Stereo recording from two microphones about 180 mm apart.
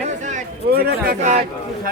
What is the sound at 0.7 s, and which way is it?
Speech, 55° right (ahead or behind).